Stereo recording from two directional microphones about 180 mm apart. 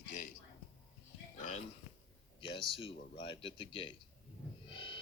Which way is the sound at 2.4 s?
25° left (ahead or behind).